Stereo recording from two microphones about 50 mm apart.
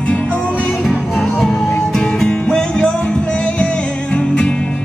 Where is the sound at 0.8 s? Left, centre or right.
Centre.